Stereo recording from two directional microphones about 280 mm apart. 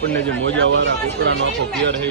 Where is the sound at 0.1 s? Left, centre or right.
Right.